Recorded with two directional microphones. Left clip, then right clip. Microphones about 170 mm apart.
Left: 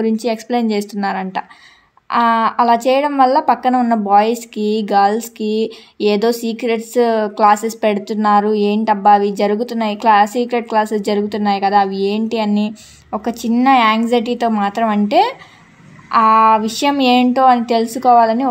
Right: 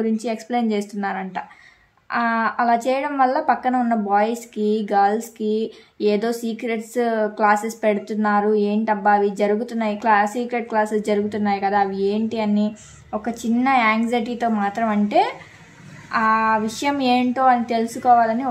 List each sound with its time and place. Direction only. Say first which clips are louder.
0.0 s a woman's voice: left 6 dB; 40° left (ahead or behind)